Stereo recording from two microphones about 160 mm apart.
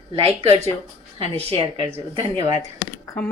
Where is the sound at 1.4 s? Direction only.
40° right (ahead or behind).